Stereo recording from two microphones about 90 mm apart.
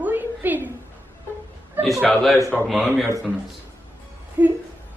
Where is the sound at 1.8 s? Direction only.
20° right (ahead or behind).